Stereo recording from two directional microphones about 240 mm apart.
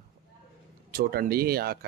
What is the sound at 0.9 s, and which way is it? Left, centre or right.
Speech, right.